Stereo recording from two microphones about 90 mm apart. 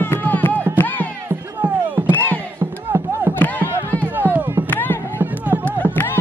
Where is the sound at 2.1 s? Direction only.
25° left (ahead or behind).